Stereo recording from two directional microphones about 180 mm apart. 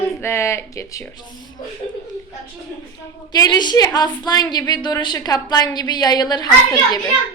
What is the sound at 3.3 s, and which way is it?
A woman's voice, 20° left (ahead or behind).